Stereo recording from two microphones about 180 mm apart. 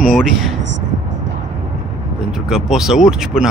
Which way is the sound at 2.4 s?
5° right (ahead or behind).